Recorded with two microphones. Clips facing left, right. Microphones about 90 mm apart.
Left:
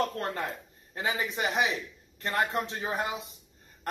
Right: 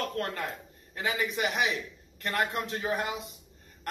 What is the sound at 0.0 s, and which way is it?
A man's voice, 30° left (ahead or behind).